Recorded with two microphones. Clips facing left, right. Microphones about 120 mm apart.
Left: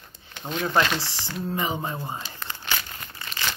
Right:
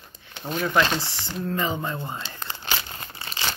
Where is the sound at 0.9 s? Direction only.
20° right (ahead or behind).